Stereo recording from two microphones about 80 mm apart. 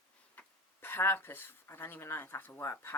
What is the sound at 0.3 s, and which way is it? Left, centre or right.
Speech, left.